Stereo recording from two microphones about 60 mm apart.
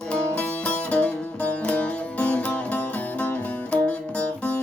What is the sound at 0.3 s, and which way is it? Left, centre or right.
Music, left.